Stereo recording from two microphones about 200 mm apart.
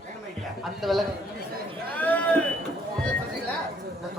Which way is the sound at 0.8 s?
Centre (ahead or behind).